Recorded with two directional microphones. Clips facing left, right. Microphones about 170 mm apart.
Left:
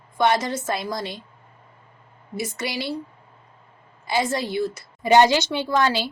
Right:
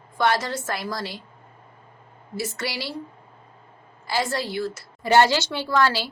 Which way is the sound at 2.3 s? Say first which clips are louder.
Left 1 dB; 20° left (ahead or behind).